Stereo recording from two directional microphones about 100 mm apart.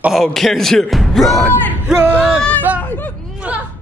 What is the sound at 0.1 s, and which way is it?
Speech, centre (ahead or behind).